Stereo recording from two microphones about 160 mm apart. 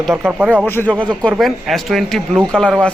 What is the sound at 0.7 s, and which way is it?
Speech, 15° left (ahead or behind).